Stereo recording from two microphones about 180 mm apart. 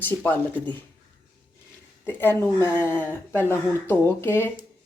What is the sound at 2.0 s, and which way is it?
Speech, 10° left (ahead or behind).